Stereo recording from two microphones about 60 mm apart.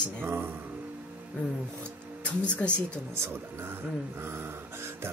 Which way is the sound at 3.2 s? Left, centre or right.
Right.